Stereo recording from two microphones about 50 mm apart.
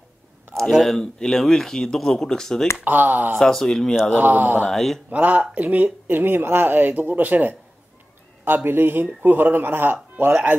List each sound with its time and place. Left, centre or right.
0.7 s speech: centre
2.8 s speech: right
3.3 s speech: centre
4.2 s speech: right
4.6 s mantra: centre
5.1 s speech: right
6.0 s speech: right